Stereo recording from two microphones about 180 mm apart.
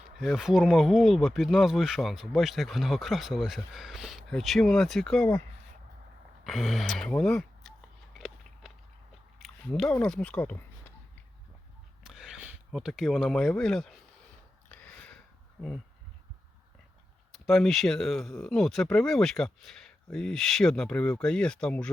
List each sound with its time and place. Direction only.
0.2 s speech: centre (ahead or behind)
6.4 s speech: centre (ahead or behind)
9.4 s speech: 5° left (ahead or behind)
12.0 s speech: 5° right (ahead or behind)
14.7 s a sound: 5° left (ahead or behind)
17.3 s speech: centre (ahead or behind)